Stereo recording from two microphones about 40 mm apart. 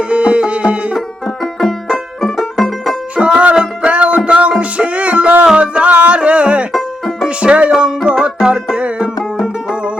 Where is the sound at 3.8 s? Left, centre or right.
Right.